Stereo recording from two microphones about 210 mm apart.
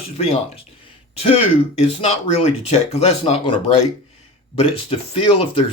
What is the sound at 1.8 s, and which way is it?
Speech, 30° left (ahead or behind).